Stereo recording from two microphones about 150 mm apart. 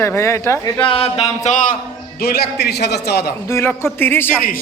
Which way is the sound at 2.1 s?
90° left.